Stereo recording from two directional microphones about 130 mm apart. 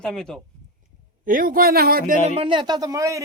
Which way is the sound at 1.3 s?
90° right.